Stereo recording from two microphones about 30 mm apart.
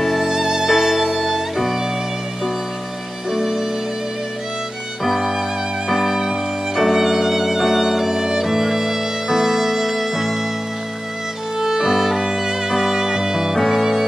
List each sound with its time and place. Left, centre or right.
0.2 s music: centre
0.7 s music: centre
3.3 s music: centre
5.0 s music: centre
6.7 s violin: centre
8.2 s music: centre
11.6 s violin: centre
12.4 s music: centre